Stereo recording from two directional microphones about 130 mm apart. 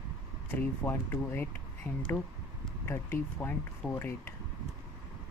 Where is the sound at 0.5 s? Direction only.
20° left (ahead or behind).